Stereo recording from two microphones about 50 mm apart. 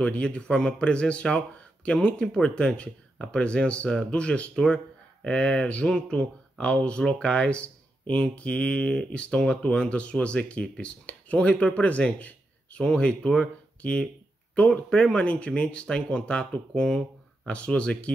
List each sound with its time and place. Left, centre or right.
0.0 s speech: left